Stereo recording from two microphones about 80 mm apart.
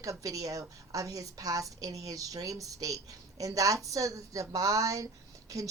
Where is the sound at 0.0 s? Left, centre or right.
Right.